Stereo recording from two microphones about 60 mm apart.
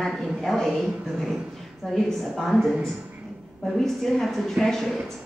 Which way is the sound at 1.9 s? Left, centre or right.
Centre.